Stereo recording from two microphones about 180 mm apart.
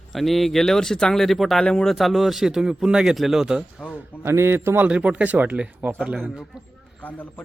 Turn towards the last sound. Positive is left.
turn(degrees=10)  # may be behind; listen again after turning